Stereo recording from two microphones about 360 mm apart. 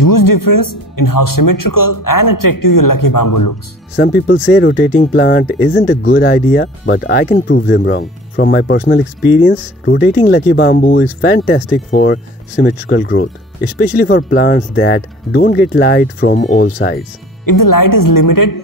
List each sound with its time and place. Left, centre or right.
0.0 s speech: left
3.9 s speech: left
17.5 s speech: left